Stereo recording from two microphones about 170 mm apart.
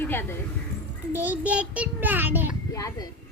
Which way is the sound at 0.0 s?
15° left (ahead or behind).